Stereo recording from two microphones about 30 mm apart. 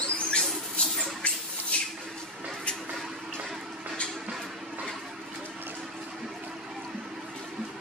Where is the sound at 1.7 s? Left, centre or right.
Left.